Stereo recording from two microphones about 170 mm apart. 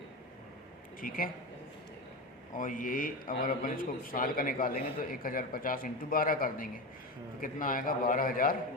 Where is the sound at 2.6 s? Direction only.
50° left (ahead or behind).